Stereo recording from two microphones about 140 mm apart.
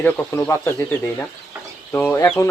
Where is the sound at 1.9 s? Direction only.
20° left (ahead or behind).